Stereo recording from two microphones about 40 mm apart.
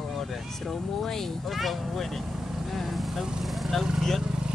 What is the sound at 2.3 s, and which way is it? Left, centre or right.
Vehicle, centre.